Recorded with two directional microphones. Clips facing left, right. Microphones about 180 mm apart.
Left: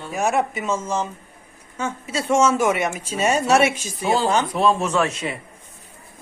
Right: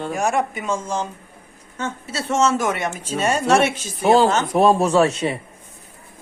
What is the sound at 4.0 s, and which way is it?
Speech, 55° right (ahead or behind).